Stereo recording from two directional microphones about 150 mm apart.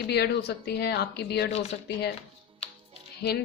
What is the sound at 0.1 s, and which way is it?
A woman's voice, 90° left.